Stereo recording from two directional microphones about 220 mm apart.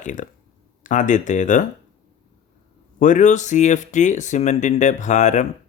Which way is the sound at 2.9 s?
35° left (ahead or behind).